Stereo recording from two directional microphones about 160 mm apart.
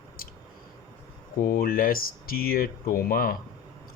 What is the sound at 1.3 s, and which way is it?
Speech, 65° left (ahead or behind).